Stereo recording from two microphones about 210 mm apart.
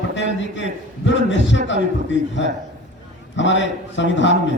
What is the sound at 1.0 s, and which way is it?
A man's voice, 60° left (ahead or behind).